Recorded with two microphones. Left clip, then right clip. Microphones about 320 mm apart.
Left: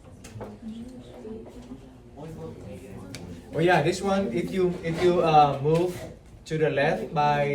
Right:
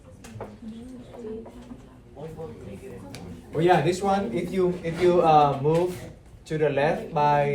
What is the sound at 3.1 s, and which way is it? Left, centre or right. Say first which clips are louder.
Speech: even; centre.